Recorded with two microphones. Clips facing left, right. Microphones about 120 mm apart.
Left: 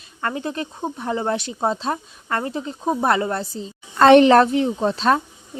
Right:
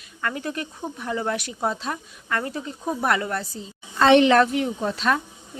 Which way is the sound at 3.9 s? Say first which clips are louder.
Left 4 dB; 50° left (ahead or behind).